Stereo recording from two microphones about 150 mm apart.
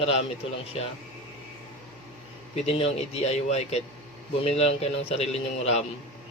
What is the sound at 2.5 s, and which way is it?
A man's voice, 45° left (ahead or behind).